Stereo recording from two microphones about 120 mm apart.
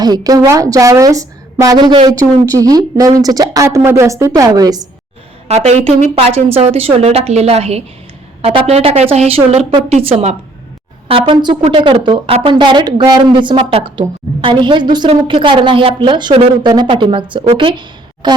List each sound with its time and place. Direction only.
0.0 s a woman's voice: 30° right (ahead or behind)
2.1 s a woman's voice: 30° right (ahead or behind)
5.5 s a woman's voice: 65° right (ahead or behind); by 18.3 s 40° right (ahead or behind)